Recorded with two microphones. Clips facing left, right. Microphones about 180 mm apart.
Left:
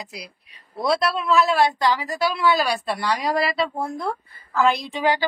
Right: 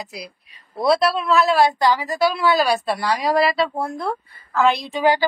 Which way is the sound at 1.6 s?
40° right (ahead or behind).